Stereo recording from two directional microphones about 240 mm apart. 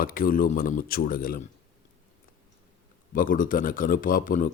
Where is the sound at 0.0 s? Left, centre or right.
Left.